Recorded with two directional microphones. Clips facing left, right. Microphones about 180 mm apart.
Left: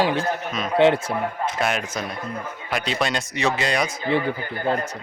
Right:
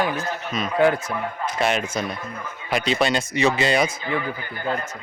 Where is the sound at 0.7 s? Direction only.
25° left (ahead or behind).